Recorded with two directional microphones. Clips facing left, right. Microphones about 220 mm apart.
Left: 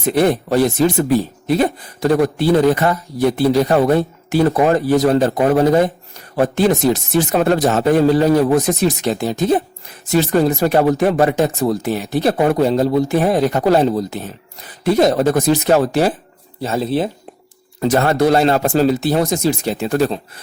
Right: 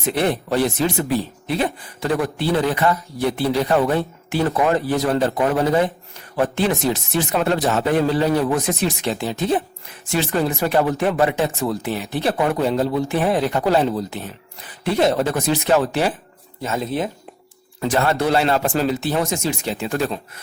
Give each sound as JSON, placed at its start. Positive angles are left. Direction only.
{"t": 0.0, "sound": "speech", "side_deg": 40}